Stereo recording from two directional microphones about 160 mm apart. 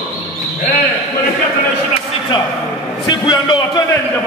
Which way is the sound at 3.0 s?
30° left (ahead or behind).